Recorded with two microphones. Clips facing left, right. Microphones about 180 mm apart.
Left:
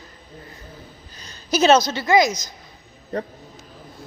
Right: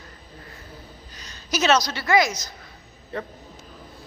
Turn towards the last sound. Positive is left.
turn(degrees=40)  # may be behind; listen again after turning